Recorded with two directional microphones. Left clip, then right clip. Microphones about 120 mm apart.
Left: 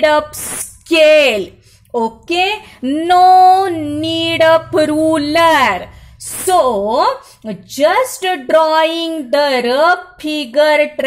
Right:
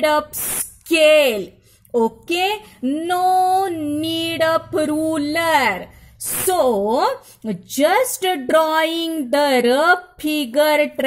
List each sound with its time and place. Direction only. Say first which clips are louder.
0.0 s a woman's voice: left 6 dB; 45° right (ahead or behind)
2.0 s a woman's voice: left 3 dB; 55° right (ahead or behind)
2.8 s music: left 10 dB; 35° right (ahead or behind)
6.4 s speech: left 5 dB; 60° right (ahead or behind)